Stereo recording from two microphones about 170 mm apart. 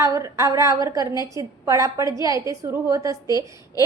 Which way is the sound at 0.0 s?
20° right (ahead or behind).